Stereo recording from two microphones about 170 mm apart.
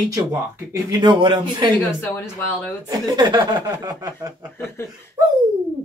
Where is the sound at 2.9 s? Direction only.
25° right (ahead or behind).